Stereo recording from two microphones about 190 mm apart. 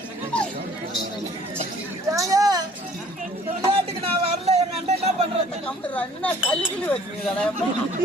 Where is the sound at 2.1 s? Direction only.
20° right (ahead or behind).